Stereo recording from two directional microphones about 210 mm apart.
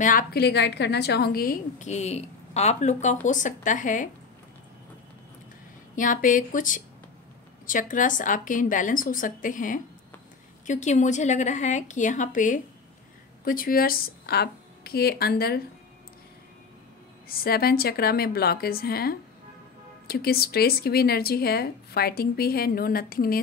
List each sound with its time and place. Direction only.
0.0 s a woman's voice: 40° left (ahead or behind)
5.9 s a woman's voice: 40° left (ahead or behind)
17.3 s speech: 45° left (ahead or behind)